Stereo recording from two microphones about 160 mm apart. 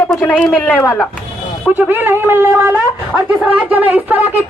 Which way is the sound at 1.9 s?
15° right (ahead or behind).